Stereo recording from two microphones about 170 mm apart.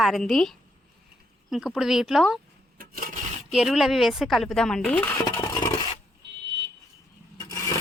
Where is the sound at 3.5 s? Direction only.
5° right (ahead or behind); by 5.7 s 15° left (ahead or behind).